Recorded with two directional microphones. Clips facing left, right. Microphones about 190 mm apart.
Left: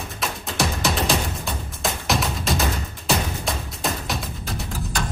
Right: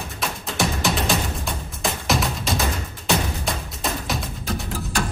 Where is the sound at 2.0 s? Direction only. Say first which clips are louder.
Even; centre (ahead or behind).